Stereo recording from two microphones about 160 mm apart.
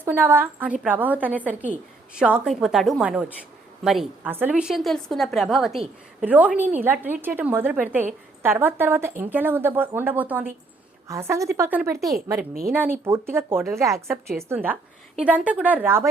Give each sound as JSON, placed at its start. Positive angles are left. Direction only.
{"t": 0.0, "sound": "a woman's voice", "side_deg": -10}
{"t": 4.3, "sound": "a woman's voice", "side_deg": -10}
{"t": 12.4, "sound": "a woman's voice", "side_deg": -70}
{"t": 12.7, "sound": "a woman's voice", "side_deg": -15}